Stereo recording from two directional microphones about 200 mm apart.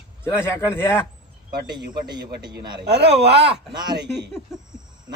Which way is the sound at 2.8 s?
55° right (ahead or behind).